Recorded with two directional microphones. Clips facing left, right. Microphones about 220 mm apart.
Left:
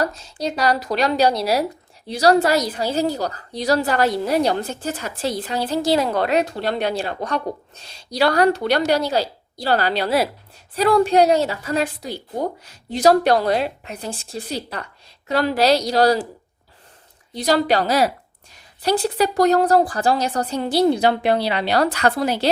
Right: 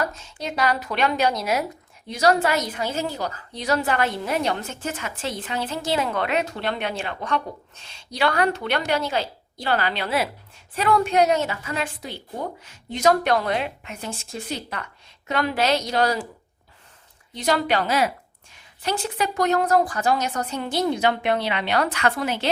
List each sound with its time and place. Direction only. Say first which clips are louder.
0.0 s a woman's voice: left 5 dB; 35° left (ahead or behind)
17.3 s a woman's voice: left 4 dB; 35° left (ahead or behind)